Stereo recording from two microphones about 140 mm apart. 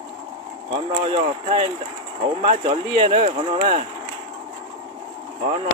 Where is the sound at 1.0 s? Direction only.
45° right (ahead or behind).